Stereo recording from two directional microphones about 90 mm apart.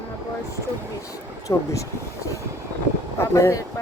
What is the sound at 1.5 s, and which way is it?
Speech, 35° left (ahead or behind).